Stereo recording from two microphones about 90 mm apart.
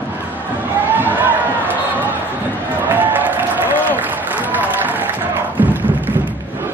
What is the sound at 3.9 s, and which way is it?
Applause, 20° right (ahead or behind).